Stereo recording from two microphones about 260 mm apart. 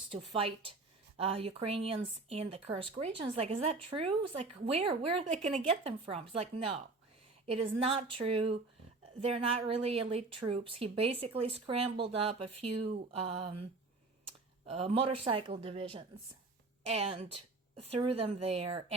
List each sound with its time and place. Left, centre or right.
0.2 s a woman's voice: right
14.7 s a woman's voice: right